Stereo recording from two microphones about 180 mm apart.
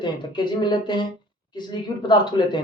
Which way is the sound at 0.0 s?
25° left (ahead or behind).